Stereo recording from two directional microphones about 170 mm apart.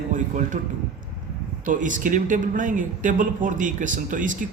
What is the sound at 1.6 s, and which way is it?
Speech, 50° right (ahead or behind).